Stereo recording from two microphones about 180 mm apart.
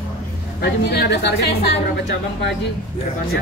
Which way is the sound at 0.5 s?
65° left (ahead or behind).